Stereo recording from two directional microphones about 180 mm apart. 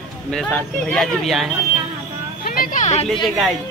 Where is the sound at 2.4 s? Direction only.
55° left (ahead or behind); by 3.1 s 40° left (ahead or behind).